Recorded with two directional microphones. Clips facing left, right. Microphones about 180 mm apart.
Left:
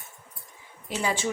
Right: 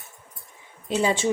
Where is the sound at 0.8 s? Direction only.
25° right (ahead or behind).